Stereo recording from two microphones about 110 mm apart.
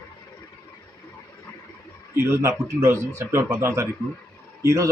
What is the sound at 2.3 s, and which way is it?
Speech, 25° right (ahead or behind).